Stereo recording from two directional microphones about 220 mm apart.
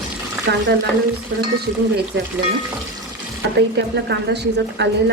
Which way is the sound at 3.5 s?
50° right (ahead or behind).